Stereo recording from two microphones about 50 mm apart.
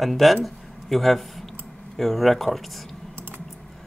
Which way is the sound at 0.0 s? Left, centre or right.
Centre.